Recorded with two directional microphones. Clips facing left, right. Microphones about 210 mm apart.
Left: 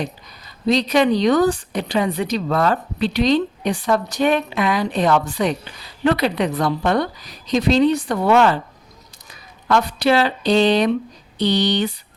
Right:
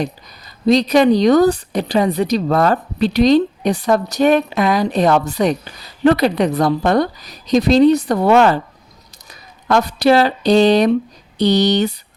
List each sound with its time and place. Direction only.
0.0 s speech: 40° right (ahead or behind)